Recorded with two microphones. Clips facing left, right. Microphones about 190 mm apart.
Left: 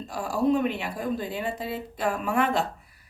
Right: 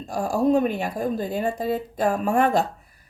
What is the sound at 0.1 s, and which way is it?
A woman's voice, 45° right (ahead or behind).